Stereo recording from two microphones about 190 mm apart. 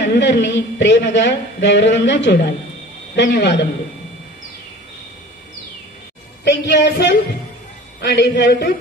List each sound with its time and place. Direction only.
0.0 s a woman's voice: 70° left (ahead or behind)
6.4 s a woman's voice: 65° left (ahead or behind)